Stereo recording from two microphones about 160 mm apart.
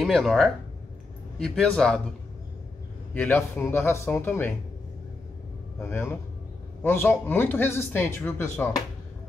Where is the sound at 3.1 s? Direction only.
10° left (ahead or behind).